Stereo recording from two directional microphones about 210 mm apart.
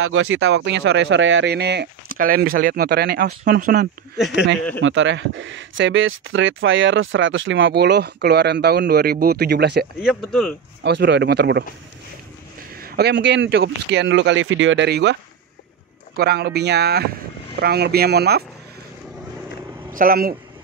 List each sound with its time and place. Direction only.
0.0 s a man's voice: 75° right (ahead or behind); by 3.9 s 45° right (ahead or behind)
4.8 s speech: 60° right (ahead or behind)
10.0 s speech: centre (ahead or behind)
10.8 s a man's voice: 55° right (ahead or behind)
16.2 s a man's voice: 50° right (ahead or behind)
19.9 s speech: 40° right (ahead or behind)